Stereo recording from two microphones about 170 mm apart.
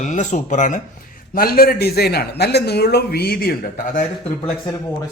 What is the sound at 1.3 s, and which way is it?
Speech, 60° left (ahead or behind).